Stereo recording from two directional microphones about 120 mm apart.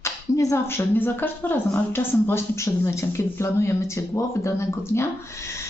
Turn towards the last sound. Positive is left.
turn(degrees=25)  # may be behind; listen again after turning